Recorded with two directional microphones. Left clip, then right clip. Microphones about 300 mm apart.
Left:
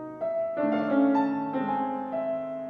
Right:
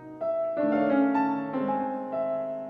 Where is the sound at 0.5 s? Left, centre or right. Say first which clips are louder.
Right 1 dB; right.